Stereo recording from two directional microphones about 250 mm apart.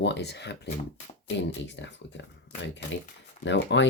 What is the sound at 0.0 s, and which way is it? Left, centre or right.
Speech, left.